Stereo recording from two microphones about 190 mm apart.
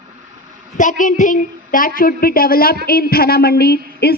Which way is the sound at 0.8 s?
45° left (ahead or behind).